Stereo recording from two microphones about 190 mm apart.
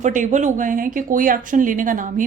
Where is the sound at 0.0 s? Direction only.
40° right (ahead or behind).